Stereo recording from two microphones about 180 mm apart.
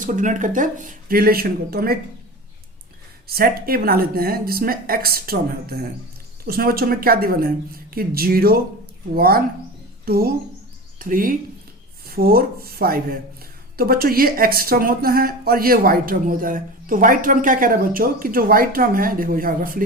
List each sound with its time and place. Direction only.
0.0 s speech: 45° right (ahead or behind)
3.2 s a woman's voice: 55° right (ahead or behind)